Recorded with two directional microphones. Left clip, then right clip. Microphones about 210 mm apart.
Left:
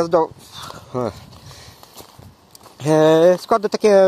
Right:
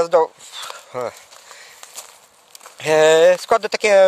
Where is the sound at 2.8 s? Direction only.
25° right (ahead or behind).